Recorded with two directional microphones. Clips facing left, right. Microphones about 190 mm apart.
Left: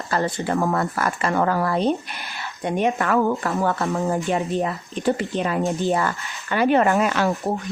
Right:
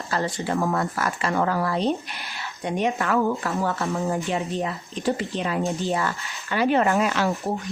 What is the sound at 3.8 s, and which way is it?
Speech, 35° left (ahead or behind).